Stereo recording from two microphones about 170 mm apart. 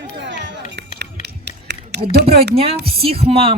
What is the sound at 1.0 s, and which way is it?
Run, 90° right.